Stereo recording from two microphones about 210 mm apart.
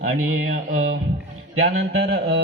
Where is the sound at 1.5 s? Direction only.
65° right (ahead or behind).